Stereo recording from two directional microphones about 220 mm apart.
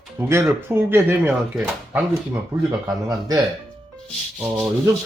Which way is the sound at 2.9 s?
15° right (ahead or behind).